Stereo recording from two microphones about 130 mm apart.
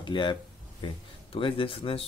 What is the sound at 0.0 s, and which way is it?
A man's voice, 40° left (ahead or behind).